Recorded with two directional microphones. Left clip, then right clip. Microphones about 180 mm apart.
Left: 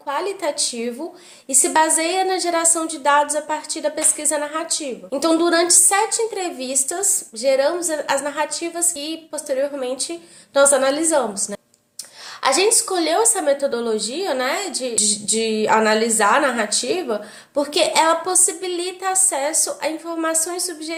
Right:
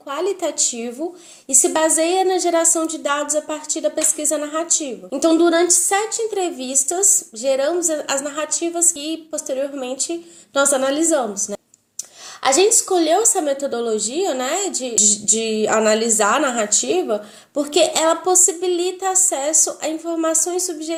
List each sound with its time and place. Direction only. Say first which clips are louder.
0.1 s a woman's voice: right 1 dB; 50° right (ahead or behind)
12.4 s a woman's voice: right 2 dB; 50° right (ahead or behind)